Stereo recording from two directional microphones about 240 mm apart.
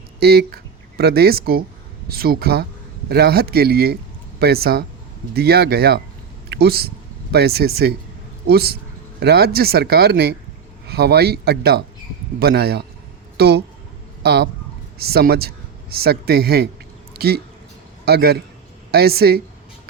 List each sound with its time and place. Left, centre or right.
0.2 s a man's voice: right